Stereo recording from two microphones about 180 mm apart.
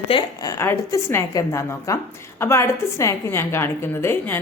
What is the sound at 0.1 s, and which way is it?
A woman's voice, 25° left (ahead or behind).